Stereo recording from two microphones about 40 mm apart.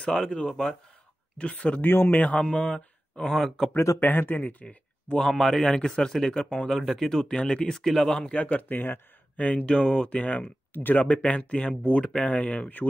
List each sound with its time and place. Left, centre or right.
0.0 s speech: left
1.4 s speech: left
1.8 s speech: left
2.5 s speech: left
4.0 s speech: left
4.4 s speech: left
5.3 s a man's voice: centre
5.6 s speech: centre
8.2 s speech: left
9.4 s speech: left
10.7 s speech: left
11.1 s speech: left